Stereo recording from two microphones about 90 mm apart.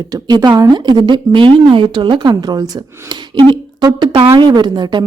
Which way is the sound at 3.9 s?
85° right.